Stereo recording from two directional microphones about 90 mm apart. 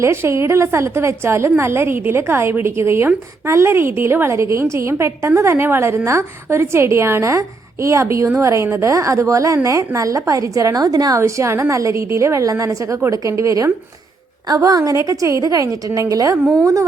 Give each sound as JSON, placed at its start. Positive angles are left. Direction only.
{"t": 0.0, "sound": "a woman's voice", "side_deg": -30}
{"t": 11.2, "sound": "a woman's voice", "side_deg": -30}